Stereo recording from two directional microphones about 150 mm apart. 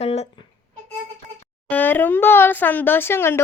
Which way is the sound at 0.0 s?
45° left (ahead or behind).